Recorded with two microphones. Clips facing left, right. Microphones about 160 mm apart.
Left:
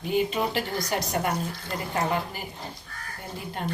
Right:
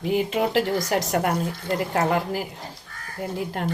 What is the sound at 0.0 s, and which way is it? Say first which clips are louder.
Speech: right 3 dB; 85° right.